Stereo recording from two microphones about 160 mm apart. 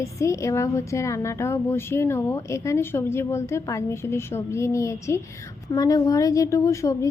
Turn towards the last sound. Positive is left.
turn(degrees=20)  # may be behind; listen again after turning